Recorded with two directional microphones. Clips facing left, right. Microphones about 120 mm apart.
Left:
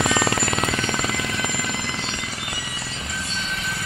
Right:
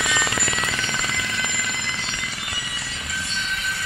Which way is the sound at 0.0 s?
35° left (ahead or behind).